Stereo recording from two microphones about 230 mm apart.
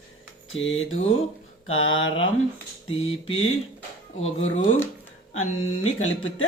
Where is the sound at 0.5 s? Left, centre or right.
Left.